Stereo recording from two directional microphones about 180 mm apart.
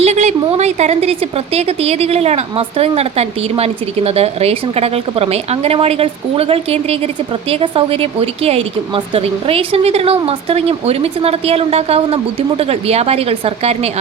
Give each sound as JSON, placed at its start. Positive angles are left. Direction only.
{"t": 0.0, "sound": "a woman's voice", "side_deg": -40}